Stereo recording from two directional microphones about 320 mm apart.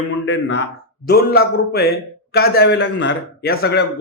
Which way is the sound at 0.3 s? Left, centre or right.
Left.